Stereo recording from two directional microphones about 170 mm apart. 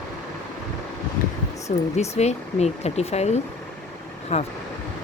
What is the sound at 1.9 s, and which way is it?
Speech, 40° left (ahead or behind).